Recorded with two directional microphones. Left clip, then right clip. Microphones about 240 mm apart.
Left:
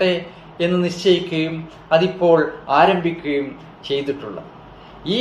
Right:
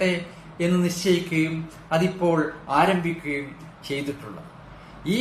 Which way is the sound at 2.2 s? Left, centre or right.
Right.